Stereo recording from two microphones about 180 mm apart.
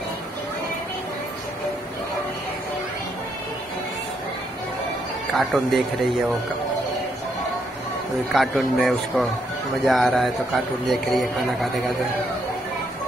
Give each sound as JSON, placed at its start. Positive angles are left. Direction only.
{"t": 5.3, "sound": "speech", "side_deg": 0}
{"t": 8.3, "sound": "speech", "side_deg": 0}